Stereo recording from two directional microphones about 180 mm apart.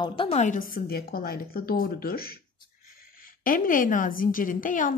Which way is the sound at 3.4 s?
50° left (ahead or behind).